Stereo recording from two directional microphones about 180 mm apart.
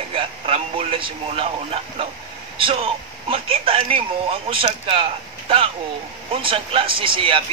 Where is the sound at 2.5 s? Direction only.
30° right (ahead or behind).